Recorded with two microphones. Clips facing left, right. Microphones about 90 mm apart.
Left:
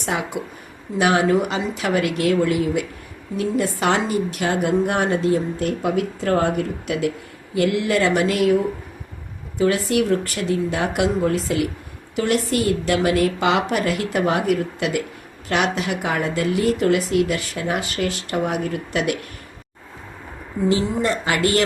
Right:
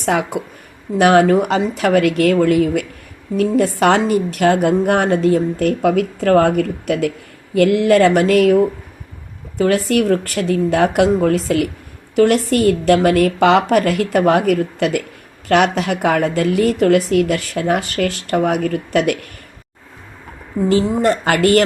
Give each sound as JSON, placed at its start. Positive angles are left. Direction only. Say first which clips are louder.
{"t": 0.9, "sound": "a woman's voice", "louder": "right 6 dB", "side_deg": -55}
{"t": 20.7, "sound": "a woman's voice", "louder": "right 5 dB", "side_deg": -50}